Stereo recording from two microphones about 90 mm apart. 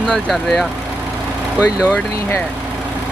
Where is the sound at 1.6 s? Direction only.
10° right (ahead or behind).